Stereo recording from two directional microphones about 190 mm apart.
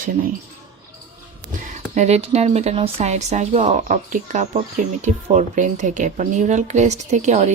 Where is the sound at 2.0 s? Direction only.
35° right (ahead or behind).